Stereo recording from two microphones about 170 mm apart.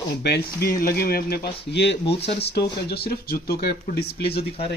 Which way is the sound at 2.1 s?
35° left (ahead or behind).